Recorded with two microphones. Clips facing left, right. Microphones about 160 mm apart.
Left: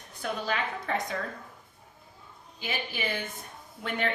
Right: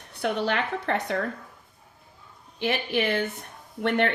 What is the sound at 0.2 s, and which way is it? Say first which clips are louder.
Speech: right 5 dB; 70° right (ahead or behind).